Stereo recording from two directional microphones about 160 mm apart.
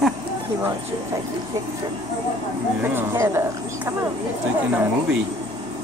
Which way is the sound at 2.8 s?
15° right (ahead or behind).